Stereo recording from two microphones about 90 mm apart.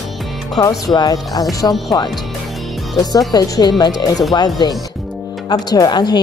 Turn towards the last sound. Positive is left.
turn(degrees=55)  # may be behind; listen again after turning